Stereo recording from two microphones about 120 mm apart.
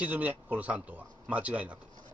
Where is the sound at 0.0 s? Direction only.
10° right (ahead or behind).